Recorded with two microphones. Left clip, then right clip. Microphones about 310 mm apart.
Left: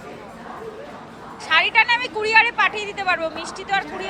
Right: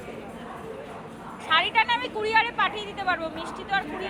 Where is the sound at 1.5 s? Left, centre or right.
Centre.